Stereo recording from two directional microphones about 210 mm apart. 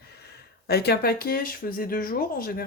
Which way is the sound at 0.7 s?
50° left (ahead or behind).